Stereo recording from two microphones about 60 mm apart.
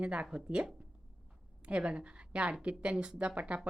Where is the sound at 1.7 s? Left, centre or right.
Centre.